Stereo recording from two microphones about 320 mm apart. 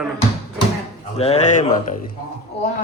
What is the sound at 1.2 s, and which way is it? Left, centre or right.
Speech, centre.